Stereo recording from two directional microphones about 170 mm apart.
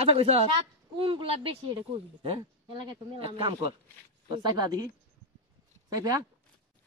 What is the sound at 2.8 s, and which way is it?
A woman's voice, 30° right (ahead or behind).